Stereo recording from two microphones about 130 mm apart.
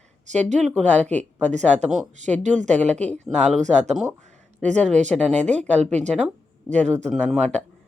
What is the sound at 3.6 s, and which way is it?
Speech, 65° right (ahead or behind).